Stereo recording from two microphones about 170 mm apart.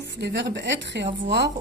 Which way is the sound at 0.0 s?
85° right.